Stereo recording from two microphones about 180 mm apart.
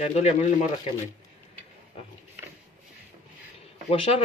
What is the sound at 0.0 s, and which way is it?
Speech, 35° left (ahead or behind).